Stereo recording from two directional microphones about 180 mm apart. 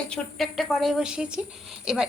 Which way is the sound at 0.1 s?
Centre (ahead or behind).